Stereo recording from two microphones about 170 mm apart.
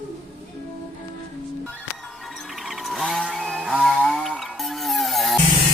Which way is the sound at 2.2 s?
Centre (ahead or behind).